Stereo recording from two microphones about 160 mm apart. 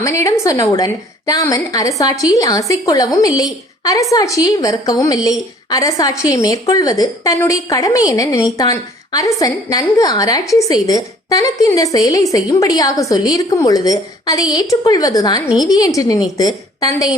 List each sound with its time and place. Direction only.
0.0 s a woman's voice: 20° left (ahead or behind)